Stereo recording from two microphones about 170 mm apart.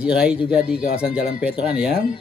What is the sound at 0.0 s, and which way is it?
Speech, 5° right (ahead or behind).